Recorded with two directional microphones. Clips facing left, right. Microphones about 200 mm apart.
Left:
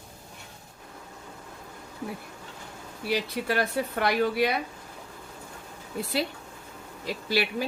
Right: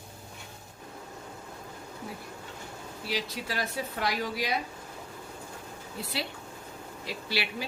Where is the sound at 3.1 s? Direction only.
60° left (ahead or behind).